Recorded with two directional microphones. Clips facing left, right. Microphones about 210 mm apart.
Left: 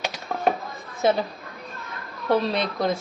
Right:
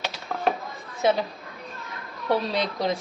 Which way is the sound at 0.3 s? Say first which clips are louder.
Left 1 dB; 20° left (ahead or behind).